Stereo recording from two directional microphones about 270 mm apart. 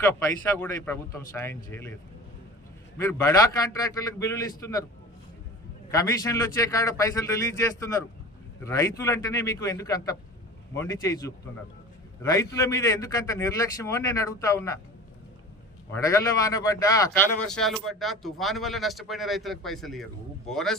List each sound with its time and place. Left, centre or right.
0.1 s a man's voice: centre
3.0 s a man's voice: centre
5.9 s a man's voice: centre
16.0 s a man's voice: centre